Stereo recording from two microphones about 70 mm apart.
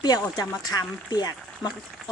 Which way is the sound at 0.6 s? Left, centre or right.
Left.